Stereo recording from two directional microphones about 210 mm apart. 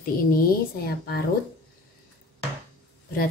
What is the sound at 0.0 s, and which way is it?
Speech, 45° left (ahead or behind).